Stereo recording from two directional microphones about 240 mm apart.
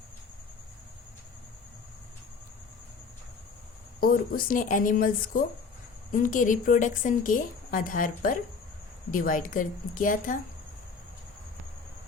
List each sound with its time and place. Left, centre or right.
4.0 s a woman's voice: left